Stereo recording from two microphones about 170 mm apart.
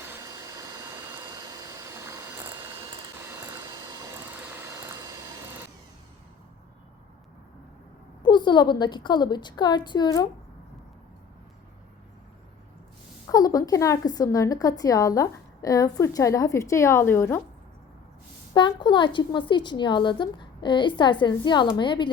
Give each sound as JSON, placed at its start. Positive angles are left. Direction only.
{"t": 0.0, "sound": "vacuum cleaner", "side_deg": -15}
{"t": 3.2, "sound": "vehicle", "side_deg": -20}
{"t": 8.2, "sound": "a woman's voice", "side_deg": 25}
{"t": 13.2, "sound": "a woman's voice", "side_deg": 20}
{"t": 18.5, "sound": "a woman's voice", "side_deg": 25}